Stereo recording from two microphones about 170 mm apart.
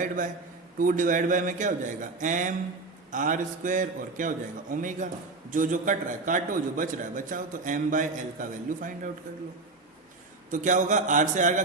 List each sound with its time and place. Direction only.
0.8 s a man's voice: 55° right (ahead or behind)
10.5 s a man's voice: 50° right (ahead or behind)